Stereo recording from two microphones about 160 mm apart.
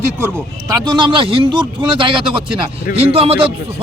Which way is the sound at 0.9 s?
30° right (ahead or behind).